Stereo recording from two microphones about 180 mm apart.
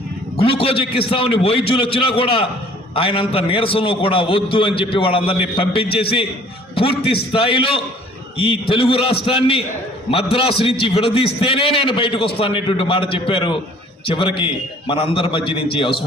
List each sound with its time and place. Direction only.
0.3 s a man's voice: 30° left (ahead or behind)